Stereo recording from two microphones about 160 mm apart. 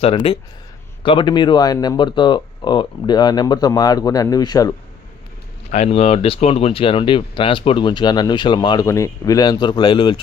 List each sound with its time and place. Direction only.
0.0 s speech: 35° left (ahead or behind)
5.7 s speech: 40° left (ahead or behind)